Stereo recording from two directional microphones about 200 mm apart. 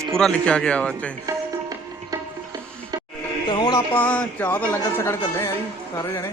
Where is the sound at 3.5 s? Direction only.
20° left (ahead or behind).